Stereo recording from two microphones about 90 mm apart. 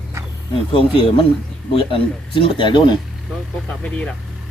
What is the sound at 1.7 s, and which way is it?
Speech, 85° left.